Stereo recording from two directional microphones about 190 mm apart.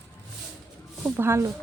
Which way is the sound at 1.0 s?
10° right (ahead or behind).